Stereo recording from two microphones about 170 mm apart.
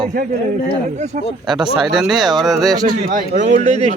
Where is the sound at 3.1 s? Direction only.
45° right (ahead or behind).